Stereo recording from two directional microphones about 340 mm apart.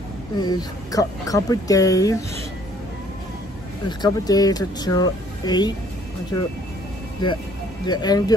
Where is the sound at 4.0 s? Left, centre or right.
Centre.